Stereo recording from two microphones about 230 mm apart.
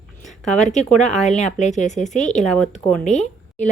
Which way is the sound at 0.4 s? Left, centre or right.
Left.